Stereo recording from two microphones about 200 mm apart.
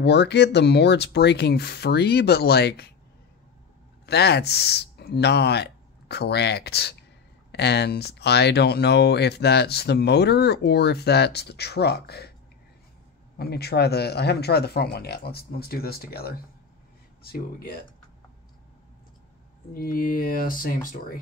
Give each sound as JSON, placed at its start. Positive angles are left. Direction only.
{"t": 0.0, "sound": "speech", "side_deg": 55}
{"t": 4.0, "sound": "speech", "side_deg": 55}
{"t": 13.4, "sound": "speech", "side_deg": 55}
{"t": 19.7, "sound": "speech", "side_deg": 45}